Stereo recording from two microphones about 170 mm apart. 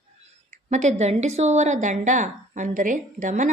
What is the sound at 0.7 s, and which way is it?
A woman's voice, 45° right (ahead or behind).